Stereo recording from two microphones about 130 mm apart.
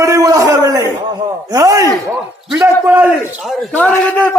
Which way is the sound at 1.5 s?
25° right (ahead or behind).